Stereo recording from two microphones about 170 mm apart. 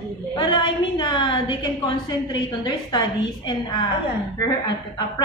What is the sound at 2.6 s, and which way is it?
A woman's voice, 25° left (ahead or behind).